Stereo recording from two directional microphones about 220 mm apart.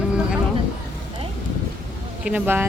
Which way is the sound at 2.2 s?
5° right (ahead or behind).